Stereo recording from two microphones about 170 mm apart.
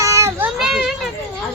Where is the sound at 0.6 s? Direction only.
Centre (ahead or behind).